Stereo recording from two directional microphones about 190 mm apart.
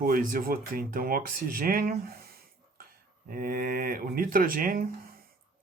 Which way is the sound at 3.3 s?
45° right (ahead or behind).